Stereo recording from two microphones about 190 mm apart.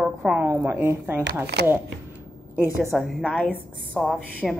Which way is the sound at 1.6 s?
60° right (ahead or behind).